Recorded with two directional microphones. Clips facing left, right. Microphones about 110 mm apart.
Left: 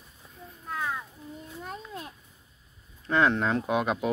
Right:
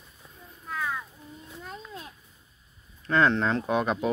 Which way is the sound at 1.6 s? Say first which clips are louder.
Left 2 dB; 50° left (ahead or behind).